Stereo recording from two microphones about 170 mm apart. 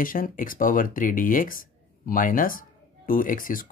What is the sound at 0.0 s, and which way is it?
Speech, 55° left (ahead or behind).